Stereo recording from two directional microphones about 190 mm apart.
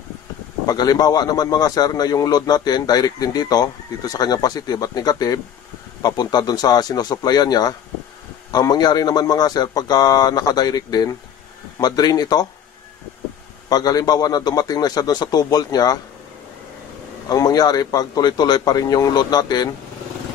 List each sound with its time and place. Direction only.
0.7 s speech: 20° left (ahead or behind)
13.7 s speech: 20° left (ahead or behind)
17.3 s speech: 20° left (ahead or behind)